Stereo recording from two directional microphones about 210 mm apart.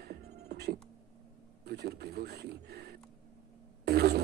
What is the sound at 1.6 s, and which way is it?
Speech, 50° right (ahead or behind).